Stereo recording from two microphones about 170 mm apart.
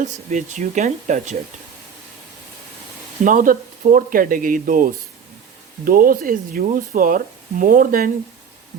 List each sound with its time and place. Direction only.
0.0 s speech: 45° right (ahead or behind)
3.2 s speech: 55° right (ahead or behind)